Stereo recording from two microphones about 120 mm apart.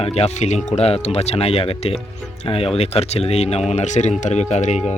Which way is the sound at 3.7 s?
75° left (ahead or behind).